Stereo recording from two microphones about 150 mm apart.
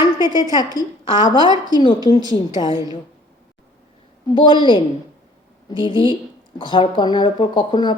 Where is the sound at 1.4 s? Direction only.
25° right (ahead or behind).